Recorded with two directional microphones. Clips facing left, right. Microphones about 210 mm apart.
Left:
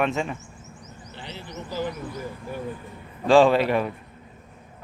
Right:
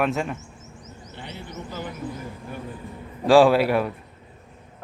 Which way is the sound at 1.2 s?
55° right (ahead or behind).